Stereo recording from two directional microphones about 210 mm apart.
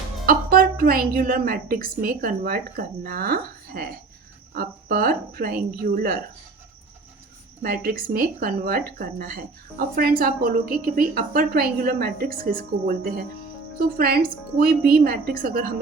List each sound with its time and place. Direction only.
0.3 s speech: 45° right (ahead or behind)
7.6 s speech: 45° right (ahead or behind)